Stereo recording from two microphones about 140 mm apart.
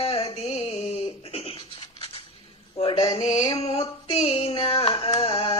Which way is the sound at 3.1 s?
55° left (ahead or behind).